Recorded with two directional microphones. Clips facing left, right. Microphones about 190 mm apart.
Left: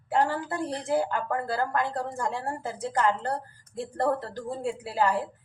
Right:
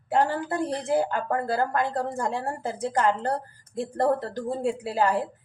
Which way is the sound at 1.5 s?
20° right (ahead or behind).